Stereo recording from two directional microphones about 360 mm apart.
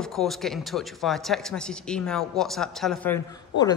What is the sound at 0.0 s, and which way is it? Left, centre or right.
A man's voice, centre.